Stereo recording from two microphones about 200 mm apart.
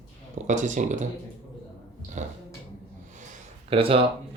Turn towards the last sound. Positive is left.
turn(degrees=-25)  # may be behind; listen again after turning